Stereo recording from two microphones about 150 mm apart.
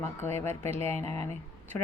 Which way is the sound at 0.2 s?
15° left (ahead or behind).